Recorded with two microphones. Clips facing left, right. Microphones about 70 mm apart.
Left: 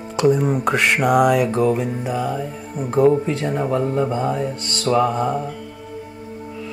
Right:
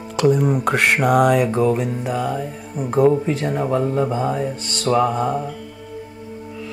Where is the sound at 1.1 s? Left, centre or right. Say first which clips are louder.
Even; centre.